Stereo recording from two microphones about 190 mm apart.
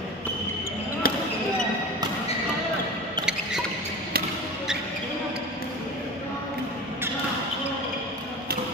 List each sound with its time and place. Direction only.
1.0 s basketball bounce: 50° left (ahead or behind)